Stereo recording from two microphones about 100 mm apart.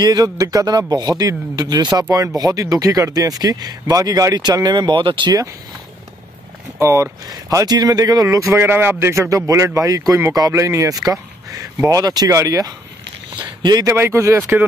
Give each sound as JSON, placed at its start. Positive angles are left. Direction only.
{"t": 0.0, "sound": "speech", "side_deg": -40}
{"t": 6.8, "sound": "speech", "side_deg": -30}
{"t": 13.8, "sound": "speech", "side_deg": -25}